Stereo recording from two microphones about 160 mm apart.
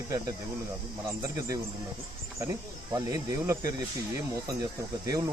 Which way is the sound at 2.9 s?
20° right (ahead or behind).